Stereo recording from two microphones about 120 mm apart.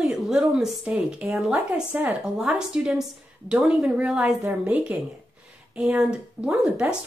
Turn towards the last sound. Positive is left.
turn(degrees=-10)  # may be behind; listen again after turning